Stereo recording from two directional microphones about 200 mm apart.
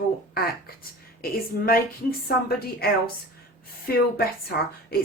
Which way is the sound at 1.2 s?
45° left (ahead or behind).